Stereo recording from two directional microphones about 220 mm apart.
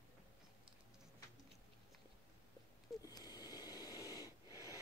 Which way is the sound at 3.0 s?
15° left (ahead or behind).